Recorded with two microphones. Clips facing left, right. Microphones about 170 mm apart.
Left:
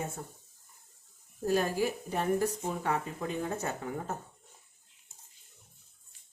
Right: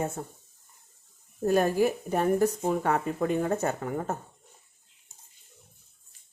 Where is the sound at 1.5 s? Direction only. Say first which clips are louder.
Right 6 dB; 50° right (ahead or behind).